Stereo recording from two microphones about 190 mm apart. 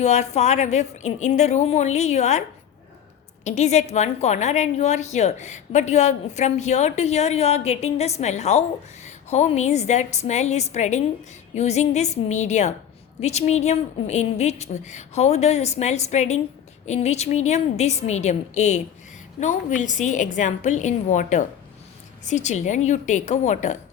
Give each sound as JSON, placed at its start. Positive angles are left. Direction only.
{"t": 0.0, "sound": "a woman's voice", "side_deg": 35}
{"t": 3.4, "sound": "a woman's voice", "side_deg": 35}